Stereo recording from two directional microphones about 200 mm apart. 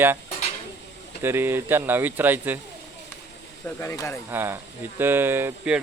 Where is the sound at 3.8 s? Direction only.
15° left (ahead or behind).